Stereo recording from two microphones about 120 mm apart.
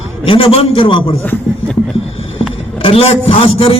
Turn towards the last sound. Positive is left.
turn(degrees=55)  # may be behind; listen again after turning